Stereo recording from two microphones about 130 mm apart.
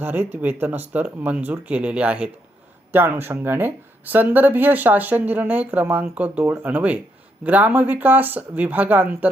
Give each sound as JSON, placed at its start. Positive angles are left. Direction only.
{"t": 0.0, "sound": "speech", "side_deg": -15}